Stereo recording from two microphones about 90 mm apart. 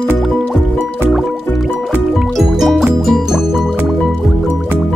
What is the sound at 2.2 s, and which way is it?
Music, centre (ahead or behind).